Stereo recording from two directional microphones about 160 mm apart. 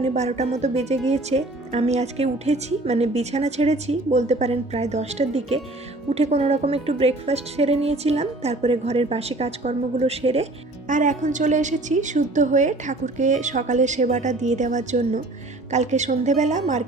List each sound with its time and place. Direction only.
0.0 s speech: 45° right (ahead or behind)